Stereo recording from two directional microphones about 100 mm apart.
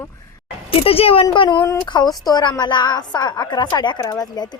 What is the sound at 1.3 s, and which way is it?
A woman's voice, 50° left (ahead or behind).